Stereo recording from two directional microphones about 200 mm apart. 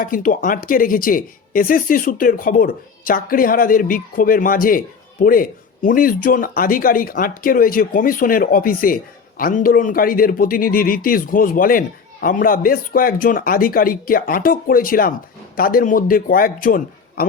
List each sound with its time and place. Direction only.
0.0 s speech: 45° left (ahead or behind)